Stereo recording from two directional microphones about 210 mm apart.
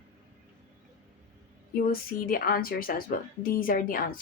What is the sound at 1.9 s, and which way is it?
Speech, 45° left (ahead or behind).